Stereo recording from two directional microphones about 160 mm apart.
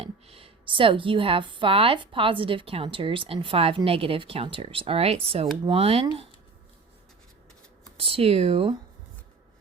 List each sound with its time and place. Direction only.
0.0 s a woman's voice: 40° right (ahead or behind)
7.9 s a woman's voice: 35° right (ahead or behind)